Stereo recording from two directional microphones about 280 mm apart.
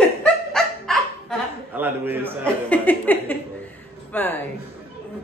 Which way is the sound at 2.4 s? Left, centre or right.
Centre.